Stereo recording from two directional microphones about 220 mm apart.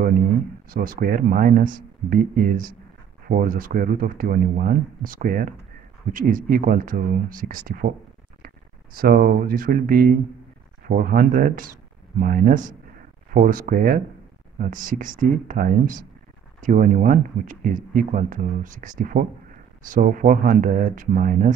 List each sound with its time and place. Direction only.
0.7 s speech: 40° right (ahead or behind)
8.9 s speech: 40° right (ahead or behind)